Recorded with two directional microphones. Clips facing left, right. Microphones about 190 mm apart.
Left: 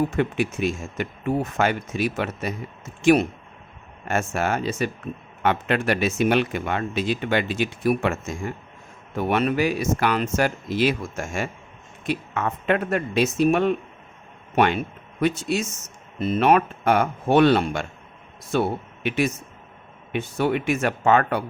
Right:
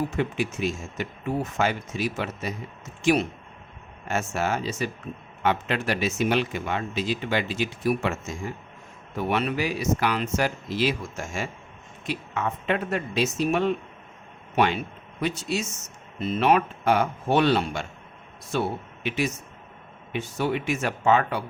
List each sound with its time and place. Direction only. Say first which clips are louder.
0.2 s a man's voice: left 3 dB; 55° left (ahead or behind)